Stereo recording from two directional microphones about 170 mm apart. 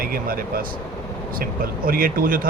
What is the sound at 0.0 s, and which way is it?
Speech, 60° right (ahead or behind).